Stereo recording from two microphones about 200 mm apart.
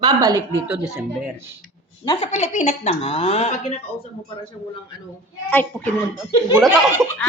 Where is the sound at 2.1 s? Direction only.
30° left (ahead or behind).